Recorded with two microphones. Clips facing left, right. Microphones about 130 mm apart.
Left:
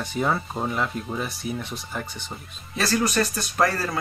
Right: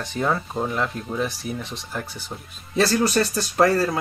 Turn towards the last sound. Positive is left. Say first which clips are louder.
# right 5 dB
turn(degrees=-25)  # may be behind; listen again after turning